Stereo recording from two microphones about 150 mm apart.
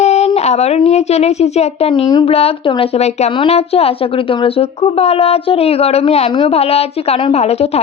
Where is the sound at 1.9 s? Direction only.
30° left (ahead or behind).